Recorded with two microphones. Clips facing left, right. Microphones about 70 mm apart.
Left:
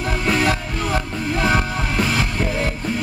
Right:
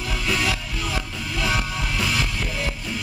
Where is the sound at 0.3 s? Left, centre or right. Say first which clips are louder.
Left 5 dB; left.